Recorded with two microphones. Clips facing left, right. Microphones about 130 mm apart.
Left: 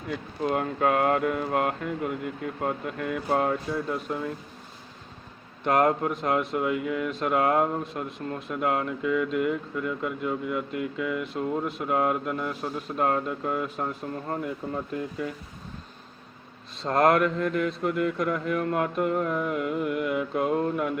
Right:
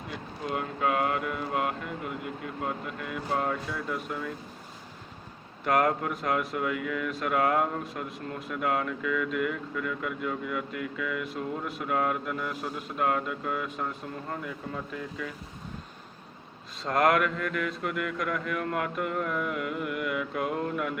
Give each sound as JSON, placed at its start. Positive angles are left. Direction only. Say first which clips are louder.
{"t": 0.4, "sound": "speech", "louder": "left 5 dB", "side_deg": 45}
{"t": 5.6, "sound": "speech", "louder": "left 3 dB", "side_deg": 30}
{"t": 16.8, "sound": "speech", "louder": "left 3 dB", "side_deg": 30}